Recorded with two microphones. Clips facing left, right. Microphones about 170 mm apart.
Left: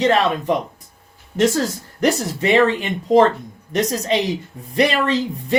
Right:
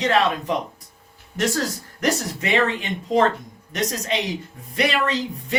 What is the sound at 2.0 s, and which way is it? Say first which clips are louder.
Speech: left 5 dB; 30° left (ahead or behind).